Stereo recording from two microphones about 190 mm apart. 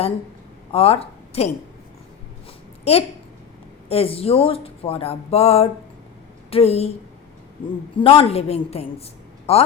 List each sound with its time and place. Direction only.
0.7 s a woman's voice: 30° left (ahead or behind)
2.9 s speech: 35° left (ahead or behind)
7.9 s speech: 30° left (ahead or behind)